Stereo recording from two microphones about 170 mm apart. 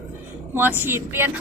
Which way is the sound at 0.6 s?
10° right (ahead or behind).